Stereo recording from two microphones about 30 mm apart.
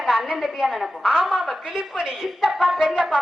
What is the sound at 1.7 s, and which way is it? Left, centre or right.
Speech, right.